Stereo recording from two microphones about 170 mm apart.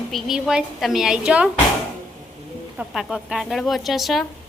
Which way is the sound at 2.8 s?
Centre (ahead or behind).